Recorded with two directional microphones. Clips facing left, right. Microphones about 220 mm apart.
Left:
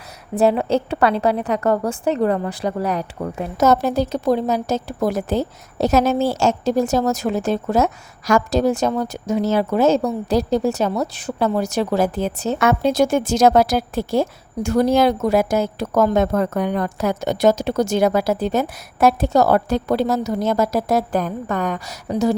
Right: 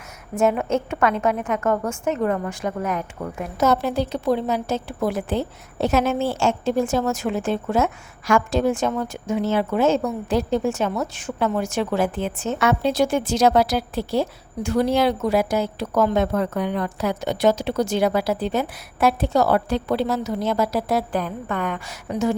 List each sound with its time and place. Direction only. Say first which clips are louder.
0.3 s a woman's voice: left 3 dB; 35° left (ahead or behind)